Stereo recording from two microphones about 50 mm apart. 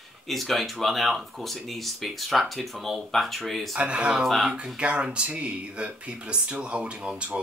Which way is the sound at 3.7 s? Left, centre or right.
Right.